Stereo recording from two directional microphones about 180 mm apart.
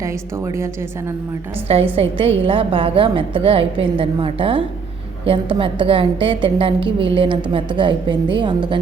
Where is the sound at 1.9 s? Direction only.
30° right (ahead or behind).